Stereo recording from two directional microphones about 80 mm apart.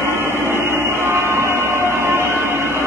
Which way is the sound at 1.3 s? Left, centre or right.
Right.